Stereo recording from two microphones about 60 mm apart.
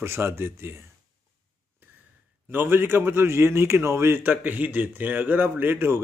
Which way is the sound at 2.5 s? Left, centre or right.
Right.